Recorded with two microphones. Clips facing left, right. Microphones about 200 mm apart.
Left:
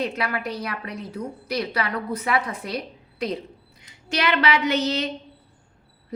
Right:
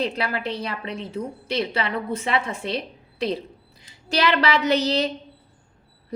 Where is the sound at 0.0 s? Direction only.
30° right (ahead or behind).